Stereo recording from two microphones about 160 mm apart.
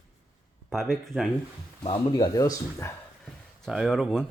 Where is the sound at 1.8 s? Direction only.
35° left (ahead or behind).